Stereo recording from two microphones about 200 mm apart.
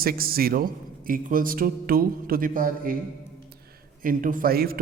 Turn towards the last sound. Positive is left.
turn(degrees=-50)  # may be behind; listen again after turning